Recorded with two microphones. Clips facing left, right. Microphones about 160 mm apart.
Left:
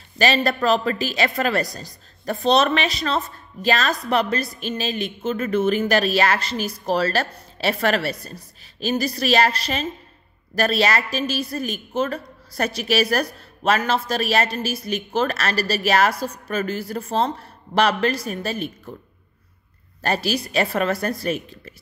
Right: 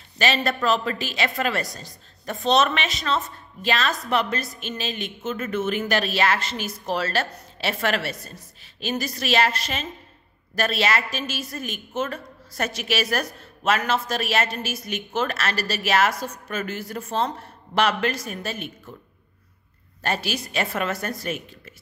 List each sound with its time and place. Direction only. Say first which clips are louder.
0.2 s a woman's voice: left 3 dB; 35° left (ahead or behind)
20.0 s a woman's voice: left 4 dB; 35° left (ahead or behind)